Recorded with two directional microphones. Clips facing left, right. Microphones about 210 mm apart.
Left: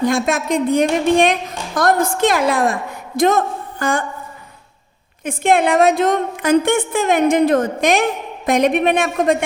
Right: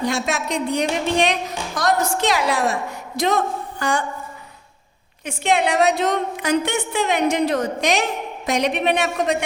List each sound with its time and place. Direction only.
0.0 s a woman's voice: 50° left (ahead or behind)
5.2 s a woman's voice: 50° left (ahead or behind)